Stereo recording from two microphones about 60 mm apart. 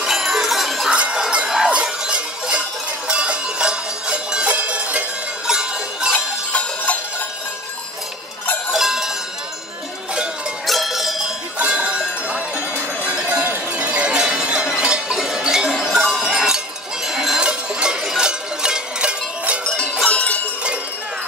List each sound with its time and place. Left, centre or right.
0.0 s bell: centre
0.8 s jingle bell: centre
1.2 s a sound: centre
3.1 s music: centre
5.5 s music: centre
6.1 s jingle bell: left
8.7 s cowbell: centre
10.7 s cowbell: centre
11.5 s cowbell: centre
16.1 s a sound: centre
17.4 s cowbell: centre
20.1 s a sound: left